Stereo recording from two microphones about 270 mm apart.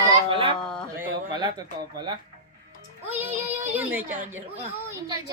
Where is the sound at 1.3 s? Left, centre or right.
Centre.